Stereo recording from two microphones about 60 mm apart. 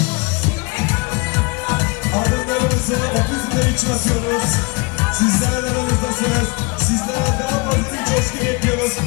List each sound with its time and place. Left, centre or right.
1.7 s music: left
5.2 s music: left
7.2 s speech: left